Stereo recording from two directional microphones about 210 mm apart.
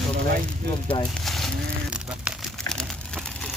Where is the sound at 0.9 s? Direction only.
20° left (ahead or behind).